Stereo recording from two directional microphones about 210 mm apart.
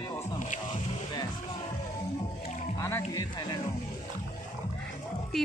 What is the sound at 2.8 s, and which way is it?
Speech, 15° left (ahead or behind).